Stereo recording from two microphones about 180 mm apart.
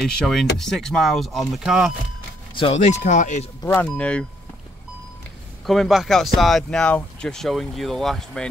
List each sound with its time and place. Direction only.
0.0 s speech: centre (ahead or behind)
2.5 s speech: 35° left (ahead or behind)
3.6 s speech: 10° left (ahead or behind)
5.7 s speech: centre (ahead or behind)